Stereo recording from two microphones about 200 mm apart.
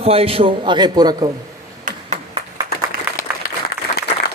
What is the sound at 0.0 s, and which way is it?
A man's voice, 30° right (ahead or behind).